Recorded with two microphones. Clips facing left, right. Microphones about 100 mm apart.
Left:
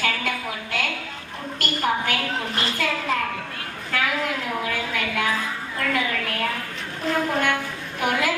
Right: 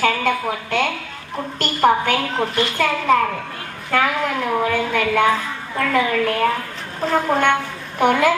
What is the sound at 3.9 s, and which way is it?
A woman's voice, 40° right (ahead or behind).